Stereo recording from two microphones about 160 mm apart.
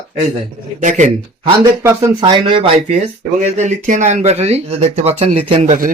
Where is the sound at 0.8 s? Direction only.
50° right (ahead or behind).